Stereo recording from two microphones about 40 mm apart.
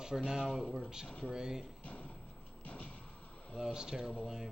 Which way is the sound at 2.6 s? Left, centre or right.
Left.